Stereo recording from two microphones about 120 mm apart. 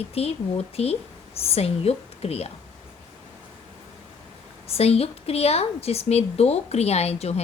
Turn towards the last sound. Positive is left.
turn(degrees=60)  # may be behind; listen again after turning